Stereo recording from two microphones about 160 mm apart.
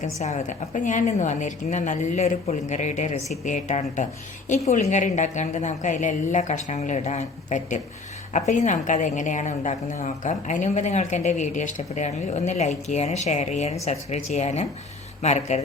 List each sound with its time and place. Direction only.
0.0 s a woman's voice: 45° left (ahead or behind)